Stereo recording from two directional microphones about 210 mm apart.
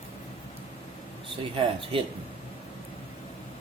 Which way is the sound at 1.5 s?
25° right (ahead or behind).